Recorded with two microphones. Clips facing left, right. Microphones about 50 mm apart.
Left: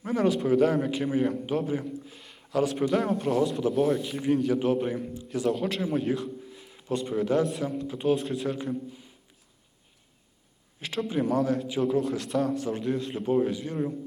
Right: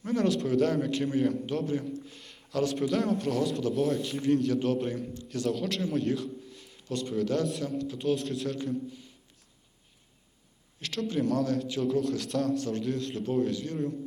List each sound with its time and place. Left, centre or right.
0.0 s a man's voice: centre
10.8 s a man's voice: centre